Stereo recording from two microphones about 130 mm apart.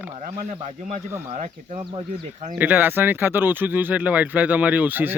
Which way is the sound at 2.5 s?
15° right (ahead or behind).